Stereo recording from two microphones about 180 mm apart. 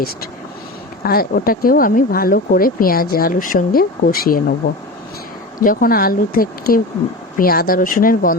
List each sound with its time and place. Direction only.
1.0 s speech: 55° left (ahead or behind)
5.5 s speech: 50° left (ahead or behind)